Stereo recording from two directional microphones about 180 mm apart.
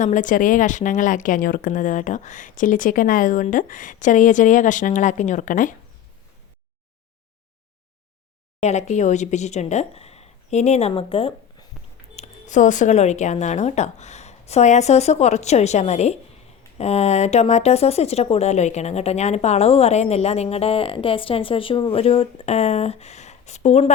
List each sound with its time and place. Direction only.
0.0 s speech: 45° left (ahead or behind)
8.6 s speech: 40° left (ahead or behind)